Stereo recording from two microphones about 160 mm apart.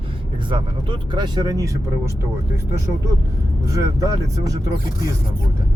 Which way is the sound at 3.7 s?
20° right (ahead or behind).